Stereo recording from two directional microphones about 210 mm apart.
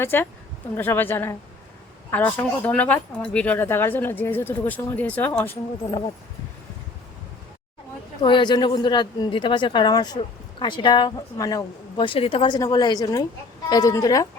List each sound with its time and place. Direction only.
0.0 s speech: 10° left (ahead or behind)
8.2 s speech: 20° left (ahead or behind)